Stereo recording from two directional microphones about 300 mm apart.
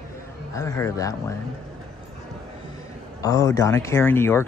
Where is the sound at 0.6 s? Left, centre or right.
Centre.